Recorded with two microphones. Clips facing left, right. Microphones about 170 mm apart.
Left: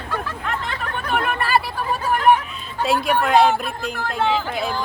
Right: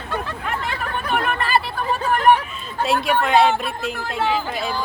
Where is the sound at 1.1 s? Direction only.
5° left (ahead or behind).